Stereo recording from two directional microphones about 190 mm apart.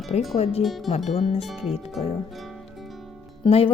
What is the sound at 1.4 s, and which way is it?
Music, centre (ahead or behind).